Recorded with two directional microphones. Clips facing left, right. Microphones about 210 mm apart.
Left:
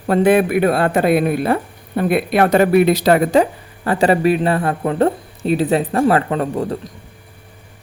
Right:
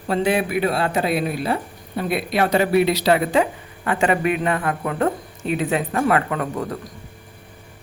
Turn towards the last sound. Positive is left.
turn(degrees=30)  # may be behind; listen again after turning